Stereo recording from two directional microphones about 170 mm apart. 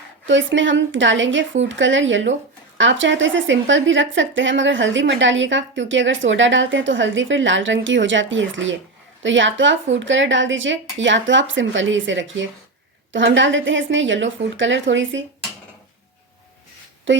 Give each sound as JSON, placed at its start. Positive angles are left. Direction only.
{"t": 0.3, "sound": "a woman's voice", "side_deg": -90}
{"t": 17.1, "sound": "speech", "side_deg": -90}